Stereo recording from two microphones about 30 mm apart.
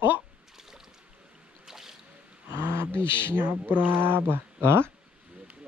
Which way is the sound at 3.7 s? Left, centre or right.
Right.